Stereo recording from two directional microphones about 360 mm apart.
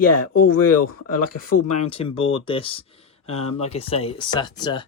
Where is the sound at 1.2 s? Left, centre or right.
Left.